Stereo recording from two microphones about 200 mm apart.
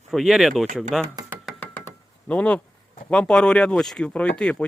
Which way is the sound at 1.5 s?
10° left (ahead or behind).